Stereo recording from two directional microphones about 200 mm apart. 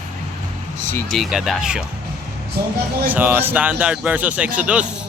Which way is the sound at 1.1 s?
Centre (ahead or behind).